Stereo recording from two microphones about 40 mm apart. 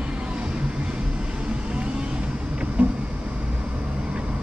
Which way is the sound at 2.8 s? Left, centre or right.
Right.